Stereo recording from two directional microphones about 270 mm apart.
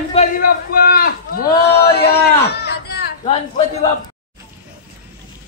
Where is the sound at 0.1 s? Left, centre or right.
Left.